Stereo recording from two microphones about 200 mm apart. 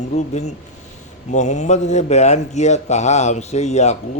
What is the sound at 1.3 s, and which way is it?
A man's voice, 35° left (ahead or behind).